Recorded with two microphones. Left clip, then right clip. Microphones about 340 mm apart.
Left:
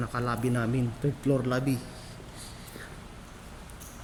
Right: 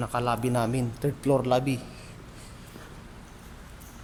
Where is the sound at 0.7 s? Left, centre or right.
Right.